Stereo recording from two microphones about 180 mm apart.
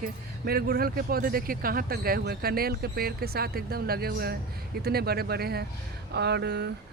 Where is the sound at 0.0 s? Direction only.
55° right (ahead or behind).